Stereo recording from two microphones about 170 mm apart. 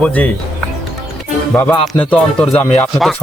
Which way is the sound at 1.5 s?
15° left (ahead or behind).